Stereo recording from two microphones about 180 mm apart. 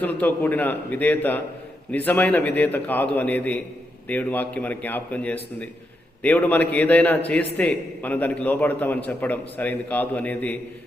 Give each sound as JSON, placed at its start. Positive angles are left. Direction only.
{"t": 0.0, "sound": "a man's voice", "side_deg": 10}